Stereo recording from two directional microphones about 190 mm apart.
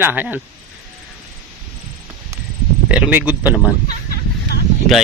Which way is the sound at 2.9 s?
5° right (ahead or behind).